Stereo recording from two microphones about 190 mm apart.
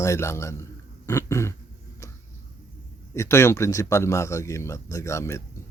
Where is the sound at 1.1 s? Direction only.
15° left (ahead or behind).